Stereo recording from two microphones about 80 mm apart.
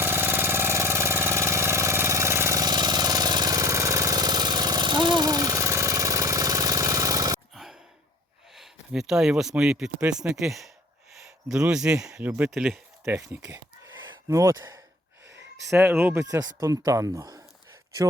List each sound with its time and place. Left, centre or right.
0.0 s engine: right
2.6 s vehicle: right
7.5 s sigh: centre
9.0 s speech: centre
12.2 s speech: right
12.5 s speech: centre
13.1 s speech: right
13.4 s a sound: right
14.5 s speech: right
15.7 s speech: right
16.2 s speech: right